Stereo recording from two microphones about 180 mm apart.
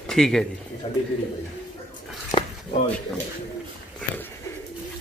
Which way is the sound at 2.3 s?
30° left (ahead or behind).